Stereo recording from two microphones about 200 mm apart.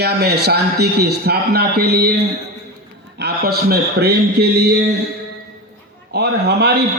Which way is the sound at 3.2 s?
55° right (ahead or behind).